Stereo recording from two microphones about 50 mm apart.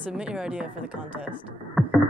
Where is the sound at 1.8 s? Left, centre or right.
Centre.